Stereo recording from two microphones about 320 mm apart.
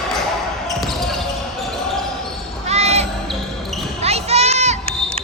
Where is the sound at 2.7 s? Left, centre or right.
Centre.